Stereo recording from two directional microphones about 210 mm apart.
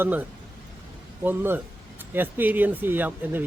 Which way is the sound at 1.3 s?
10° right (ahead or behind).